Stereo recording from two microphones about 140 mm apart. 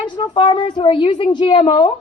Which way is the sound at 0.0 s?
35° left (ahead or behind).